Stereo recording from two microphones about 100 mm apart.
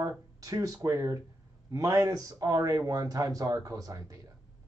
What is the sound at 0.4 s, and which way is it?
Speech, 35° right (ahead or behind).